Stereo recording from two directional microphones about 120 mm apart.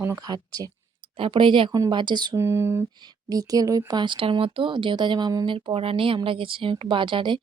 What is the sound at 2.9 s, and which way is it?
Speech, 35° right (ahead or behind).